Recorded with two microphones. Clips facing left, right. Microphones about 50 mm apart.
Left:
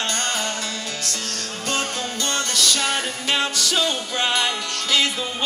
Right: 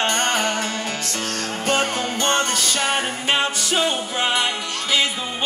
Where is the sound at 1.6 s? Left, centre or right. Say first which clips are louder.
Right 4 dB; right.